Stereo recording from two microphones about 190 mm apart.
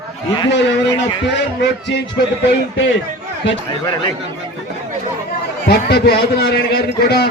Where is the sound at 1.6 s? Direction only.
60° left (ahead or behind).